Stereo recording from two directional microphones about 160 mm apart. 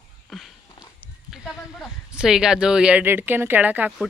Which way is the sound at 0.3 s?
Centre (ahead or behind).